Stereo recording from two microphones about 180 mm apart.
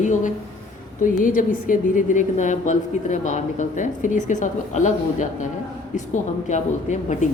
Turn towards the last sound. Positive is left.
turn(degrees=40)  # may be behind; listen again after turning